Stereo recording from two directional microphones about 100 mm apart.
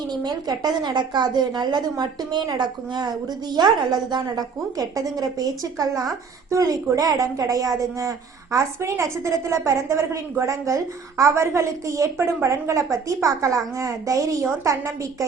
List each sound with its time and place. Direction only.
0.1 s a woman's voice: 45° right (ahead or behind)